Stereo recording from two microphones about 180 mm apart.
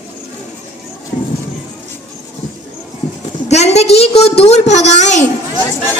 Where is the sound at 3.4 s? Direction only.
40° left (ahead or behind).